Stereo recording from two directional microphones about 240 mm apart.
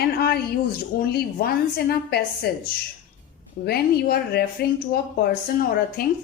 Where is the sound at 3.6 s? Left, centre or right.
Left.